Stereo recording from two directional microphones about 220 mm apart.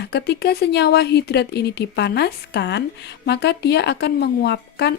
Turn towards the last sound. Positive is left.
turn(degrees=50)  # may be behind; listen again after turning